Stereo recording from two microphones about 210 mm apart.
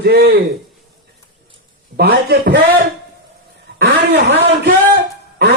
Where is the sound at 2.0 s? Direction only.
50° right (ahead or behind).